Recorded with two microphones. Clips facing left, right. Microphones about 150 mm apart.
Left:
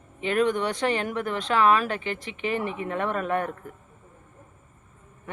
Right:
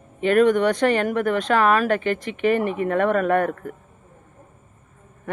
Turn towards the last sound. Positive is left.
turn(degrees=-55)  # may be behind; listen again after turning